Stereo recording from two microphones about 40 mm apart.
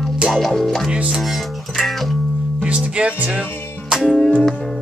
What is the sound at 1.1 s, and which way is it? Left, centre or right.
Speech, centre.